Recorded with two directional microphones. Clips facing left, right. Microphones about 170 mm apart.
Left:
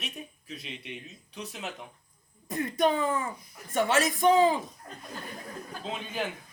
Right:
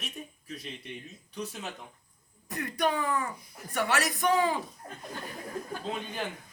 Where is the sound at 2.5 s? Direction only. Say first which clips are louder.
Left 4 dB; 20° left (ahead or behind).